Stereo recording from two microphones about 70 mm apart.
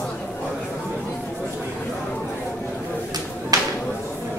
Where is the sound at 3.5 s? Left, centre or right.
Right.